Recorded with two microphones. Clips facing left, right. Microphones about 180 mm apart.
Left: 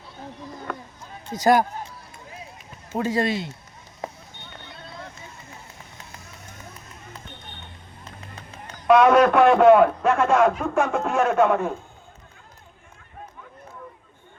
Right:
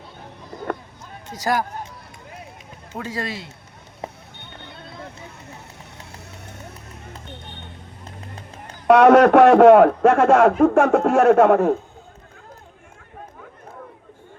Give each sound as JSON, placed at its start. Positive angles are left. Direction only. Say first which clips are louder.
{"t": 1.4, "sound": "speech", "louder": "left 5 dB", "side_deg": 20}
{"t": 2.9, "sound": "speech", "louder": "left 6 dB", "side_deg": 20}
{"t": 6.1, "sound": "run", "louder": "right 5 dB", "side_deg": -65}
{"t": 8.9, "sound": "a man's voice", "louder": "right 4 dB", "side_deg": -75}